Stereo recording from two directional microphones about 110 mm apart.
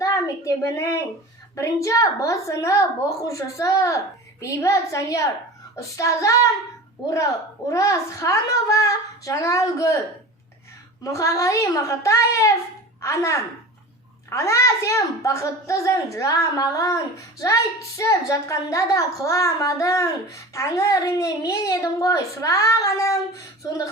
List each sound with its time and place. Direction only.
0.0 s a sound: 30° left (ahead or behind)
1.5 s speech: 30° left (ahead or behind)
7.7 s speech: 30° left (ahead or behind)
11.0 s speech: 30° left (ahead or behind)